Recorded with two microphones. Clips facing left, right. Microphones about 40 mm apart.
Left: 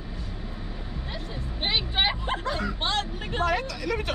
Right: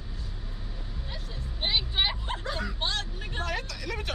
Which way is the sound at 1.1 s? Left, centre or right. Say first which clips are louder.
Left 5 dB; left.